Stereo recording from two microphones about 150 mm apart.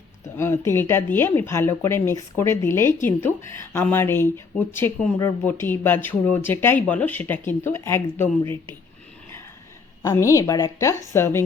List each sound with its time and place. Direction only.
0.3 s speech: 15° left (ahead or behind)
10.0 s a woman's voice: 20° left (ahead or behind)